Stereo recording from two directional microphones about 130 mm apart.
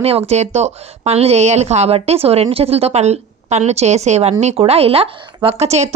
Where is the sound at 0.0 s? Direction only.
55° right (ahead or behind).